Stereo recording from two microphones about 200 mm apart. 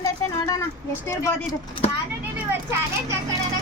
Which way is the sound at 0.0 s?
15° left (ahead or behind).